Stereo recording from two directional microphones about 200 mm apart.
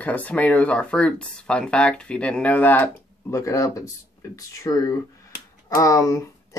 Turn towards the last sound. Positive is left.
turn(degrees=15)  # may be behind; listen again after turning